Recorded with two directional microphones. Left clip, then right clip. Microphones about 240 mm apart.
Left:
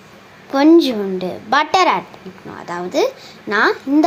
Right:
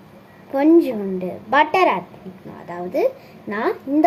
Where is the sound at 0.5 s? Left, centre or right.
Left.